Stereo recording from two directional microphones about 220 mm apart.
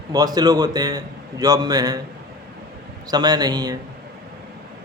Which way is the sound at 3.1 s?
20° right (ahead or behind).